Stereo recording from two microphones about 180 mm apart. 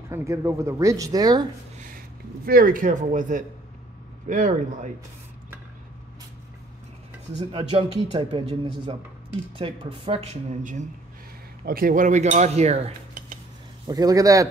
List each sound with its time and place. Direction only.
0.1 s speech: 15° right (ahead or behind)
2.4 s speech: 55° right (ahead or behind)
7.3 s speech: 35° right (ahead or behind)
9.6 s speech: 30° right (ahead or behind)
11.6 s cutlery: 50° right (ahead or behind)
13.8 s a man's voice: 20° right (ahead or behind)